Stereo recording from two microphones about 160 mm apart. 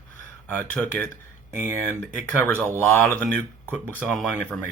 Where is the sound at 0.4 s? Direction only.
10° left (ahead or behind).